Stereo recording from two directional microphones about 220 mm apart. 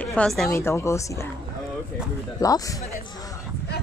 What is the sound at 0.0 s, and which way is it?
A woman's voice, 5° left (ahead or behind).